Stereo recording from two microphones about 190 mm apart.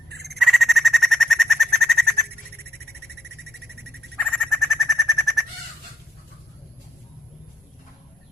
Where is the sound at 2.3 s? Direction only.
60° right (ahead or behind).